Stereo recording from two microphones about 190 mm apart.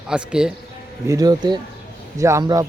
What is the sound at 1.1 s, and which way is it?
Speech, 20° right (ahead or behind).